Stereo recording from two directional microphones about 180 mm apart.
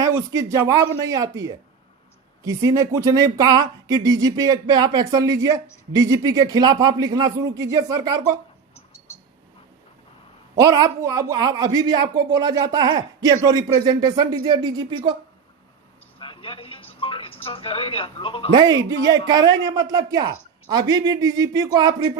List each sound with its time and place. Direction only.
0.0 s speech: 15° right (ahead or behind)
10.6 s speech: 20° right (ahead or behind)
16.1 s television: 30° left (ahead or behind)
18.5 s speech: 20° right (ahead or behind)